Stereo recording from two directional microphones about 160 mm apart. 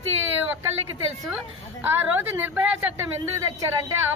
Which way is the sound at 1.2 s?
10° right (ahead or behind).